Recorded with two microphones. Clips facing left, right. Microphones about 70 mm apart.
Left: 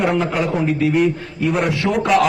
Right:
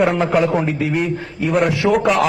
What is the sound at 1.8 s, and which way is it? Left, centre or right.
Speech, centre.